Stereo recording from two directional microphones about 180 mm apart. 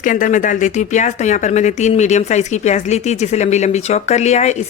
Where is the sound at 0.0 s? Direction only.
45° left (ahead or behind).